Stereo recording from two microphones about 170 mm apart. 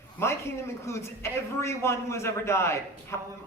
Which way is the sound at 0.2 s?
15° left (ahead or behind).